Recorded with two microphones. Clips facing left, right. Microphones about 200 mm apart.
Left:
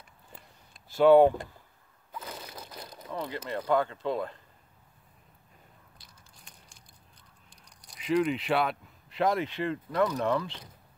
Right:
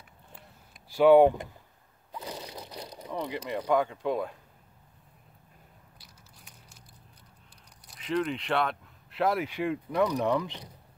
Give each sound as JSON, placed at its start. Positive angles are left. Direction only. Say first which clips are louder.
{"t": 0.8, "sound": "speech", "louder": "even", "side_deg": -10}
{"t": 2.1, "sound": "a sound", "louder": "right 3 dB", "side_deg": -20}
{"t": 3.0, "sound": "speech", "louder": "right 1 dB", "side_deg": -15}
{"t": 5.9, "sound": "crushing", "louder": "right 1 dB", "side_deg": -5}
{"t": 7.8, "sound": "a sound", "louder": "left 1 dB", "side_deg": -5}
{"t": 8.1, "sound": "speech", "louder": "left 3 dB", "side_deg": 5}